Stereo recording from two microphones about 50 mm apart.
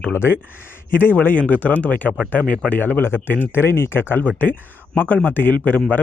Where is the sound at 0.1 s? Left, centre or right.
Left.